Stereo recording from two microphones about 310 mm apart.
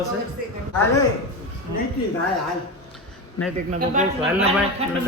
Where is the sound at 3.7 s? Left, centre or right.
Right.